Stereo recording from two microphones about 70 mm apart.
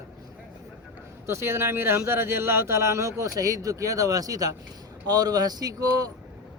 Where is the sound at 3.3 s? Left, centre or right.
Right.